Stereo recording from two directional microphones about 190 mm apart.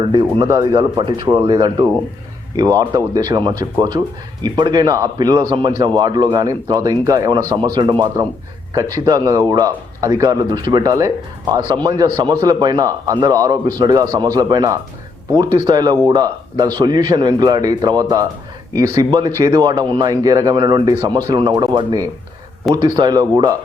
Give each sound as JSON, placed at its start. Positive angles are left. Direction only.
{"t": 0.1, "sound": "speech", "side_deg": -20}
{"t": 19.4, "sound": "speech", "side_deg": -20}